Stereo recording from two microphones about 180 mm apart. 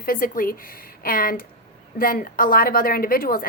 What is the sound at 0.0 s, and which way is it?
A woman's voice, 50° left (ahead or behind).